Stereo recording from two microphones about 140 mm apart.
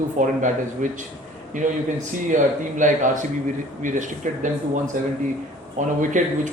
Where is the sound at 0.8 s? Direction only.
65° right (ahead or behind).